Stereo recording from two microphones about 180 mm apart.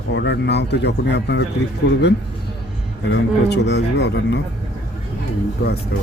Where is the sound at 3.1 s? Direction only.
70° left (ahead or behind).